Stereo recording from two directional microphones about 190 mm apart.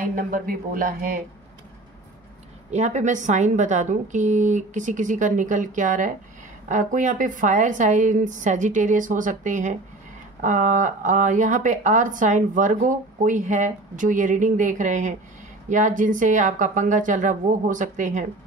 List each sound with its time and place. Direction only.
0.0 s speech: 45° right (ahead or behind)
2.7 s speech: 35° right (ahead or behind)